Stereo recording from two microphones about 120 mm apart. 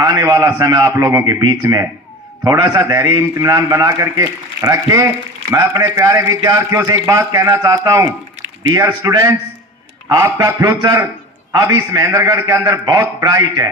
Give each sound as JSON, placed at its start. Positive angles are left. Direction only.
{"t": 0.0, "sound": "a man's voice", "side_deg": -30}